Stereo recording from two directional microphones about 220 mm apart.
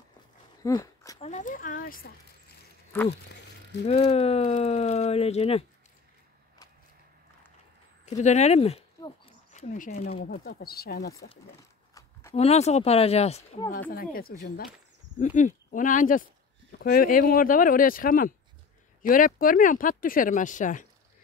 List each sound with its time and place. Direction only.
0.6 s a sound: 15° left (ahead or behind)
1.2 s speech: 35° left (ahead or behind)
2.9 s speech: 10° left (ahead or behind)
3.8 s speech: 30° left (ahead or behind)
8.0 s a sound: 30° left (ahead or behind)
9.9 s speech: 30° left (ahead or behind)
10.2 s speech: 45° left (ahead or behind)
11.9 s a sound: 10° left (ahead or behind)
12.4 s speech: 30° left (ahead or behind)